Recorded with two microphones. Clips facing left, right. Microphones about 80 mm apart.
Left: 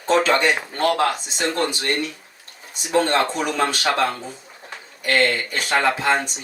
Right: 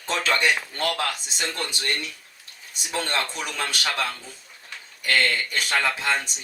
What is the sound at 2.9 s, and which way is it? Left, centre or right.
Speech, left.